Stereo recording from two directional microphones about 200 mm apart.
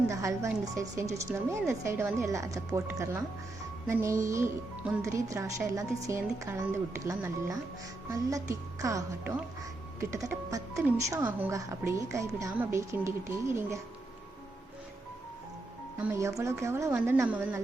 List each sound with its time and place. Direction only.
0.1 s speech: 15° right (ahead or behind)
16.0 s speech: 10° right (ahead or behind)